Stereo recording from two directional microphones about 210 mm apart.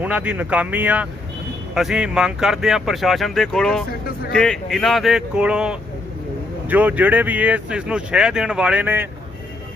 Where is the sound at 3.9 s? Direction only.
45° left (ahead or behind).